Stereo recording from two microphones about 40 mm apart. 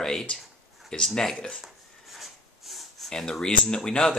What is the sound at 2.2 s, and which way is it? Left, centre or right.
Snort, centre.